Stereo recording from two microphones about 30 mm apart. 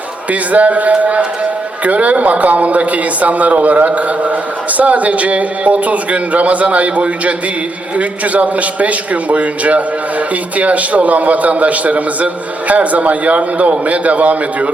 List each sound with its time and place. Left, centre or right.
0.3 s a man's voice: right